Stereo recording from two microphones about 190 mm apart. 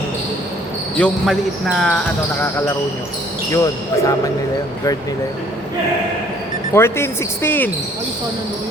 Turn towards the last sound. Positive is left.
turn(degrees=10)  # may be behind; listen again after turning